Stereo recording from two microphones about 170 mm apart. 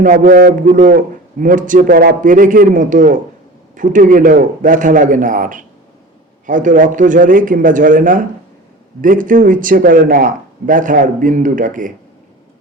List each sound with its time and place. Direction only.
0.0 s a man's voice: 50° right (ahead or behind)